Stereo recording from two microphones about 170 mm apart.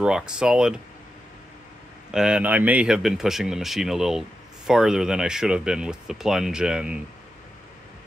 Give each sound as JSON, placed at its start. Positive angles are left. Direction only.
{"t": 0.0, "sound": "speech", "side_deg": -5}
{"t": 2.0, "sound": "speech", "side_deg": -5}